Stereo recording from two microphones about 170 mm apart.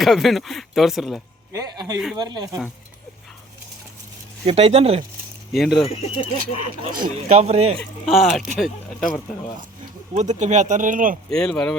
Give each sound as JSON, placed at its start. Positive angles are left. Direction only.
{"t": 0.0, "sound": "speech", "side_deg": 0}
{"t": 1.5, "sound": "speech", "side_deg": -25}
{"t": 4.4, "sound": "speech", "side_deg": -35}
{"t": 5.5, "sound": "speech", "side_deg": 0}
{"t": 5.7, "sound": "speech", "side_deg": 35}
{"t": 6.9, "sound": "speech", "side_deg": -55}
{"t": 7.3, "sound": "speech", "side_deg": -40}
{"t": 7.8, "sound": "speech", "side_deg": 0}
{"t": 10.2, "sound": "speech", "side_deg": -45}
{"t": 11.3, "sound": "speech", "side_deg": 5}